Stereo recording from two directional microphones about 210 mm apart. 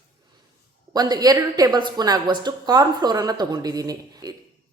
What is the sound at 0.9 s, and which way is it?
Speech, 20° right (ahead or behind).